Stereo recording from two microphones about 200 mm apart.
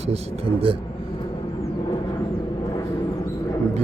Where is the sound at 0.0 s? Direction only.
30° right (ahead or behind).